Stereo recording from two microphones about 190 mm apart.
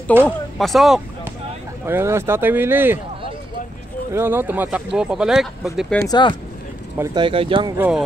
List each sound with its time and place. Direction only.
0.1 s speech: 10° right (ahead or behind)
0.6 s speech: centre (ahead or behind)
1.9 s speech: 15° right (ahead or behind)
4.1 s speech: 10° right (ahead or behind)
6.0 s speech: 25° left (ahead or behind)
7.0 s speech: 25° right (ahead or behind)
7.7 s speech: 10° right (ahead or behind)